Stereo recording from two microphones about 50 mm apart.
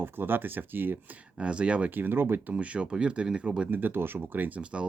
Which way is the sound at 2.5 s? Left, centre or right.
Right.